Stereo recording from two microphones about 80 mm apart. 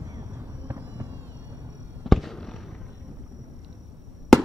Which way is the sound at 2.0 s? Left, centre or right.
Centre.